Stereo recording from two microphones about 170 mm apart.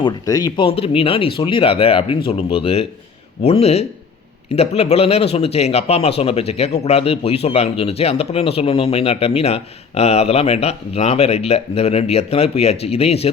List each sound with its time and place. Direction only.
0.0 s speech: 20° left (ahead or behind)